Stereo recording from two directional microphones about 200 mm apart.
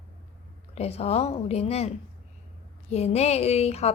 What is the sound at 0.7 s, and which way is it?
A woman's voice, 30° left (ahead or behind).